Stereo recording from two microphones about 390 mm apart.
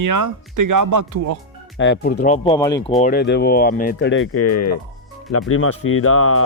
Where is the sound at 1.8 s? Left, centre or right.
Left; by 3.0 s centre.